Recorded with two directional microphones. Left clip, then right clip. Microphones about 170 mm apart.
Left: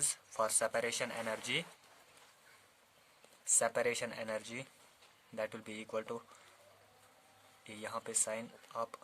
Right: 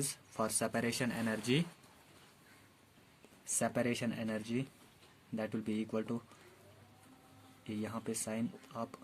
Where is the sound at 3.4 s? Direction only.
30° left (ahead or behind).